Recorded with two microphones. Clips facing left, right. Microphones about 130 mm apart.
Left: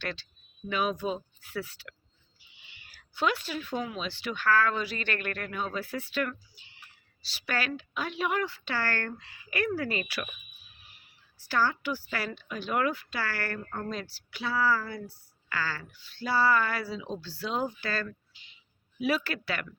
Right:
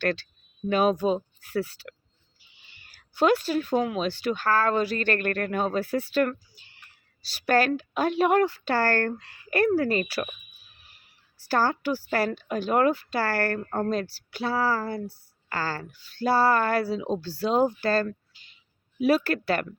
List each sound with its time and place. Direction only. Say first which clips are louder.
0.0 s a woman's voice: right 10 dB; 50° right (ahead or behind)
11.4 s a woman's voice: right 4 dB; 40° right (ahead or behind)